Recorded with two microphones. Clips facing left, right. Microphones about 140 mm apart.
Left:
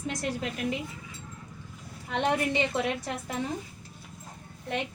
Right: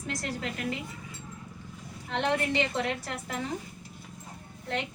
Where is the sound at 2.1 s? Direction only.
15° left (ahead or behind).